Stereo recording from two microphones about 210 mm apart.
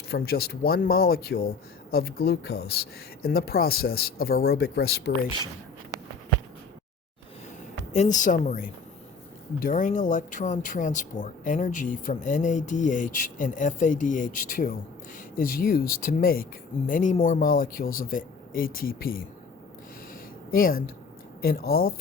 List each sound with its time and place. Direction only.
0.1 s speech: 50° left (ahead or behind)
7.9 s speech: 35° left (ahead or behind)
20.5 s speech: 45° left (ahead or behind)